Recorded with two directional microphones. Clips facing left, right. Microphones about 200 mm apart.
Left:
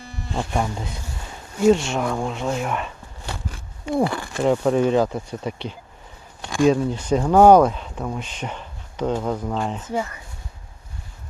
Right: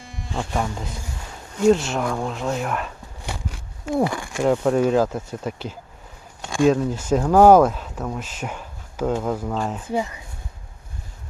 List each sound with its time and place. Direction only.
0.5 s speech: centre (ahead or behind)
4.0 s speech: 15° right (ahead or behind)
4.4 s speech: centre (ahead or behind)
9.8 s speech: 15° right (ahead or behind)